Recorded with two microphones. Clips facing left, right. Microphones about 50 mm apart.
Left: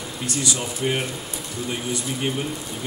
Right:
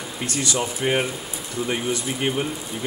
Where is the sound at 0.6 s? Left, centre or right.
Right.